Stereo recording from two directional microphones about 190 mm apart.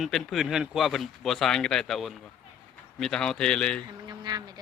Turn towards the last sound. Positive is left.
turn(degrees=-20)  # may be behind; listen again after turning